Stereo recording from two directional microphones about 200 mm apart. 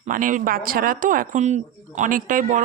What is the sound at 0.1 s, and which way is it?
Speech, 40° right (ahead or behind).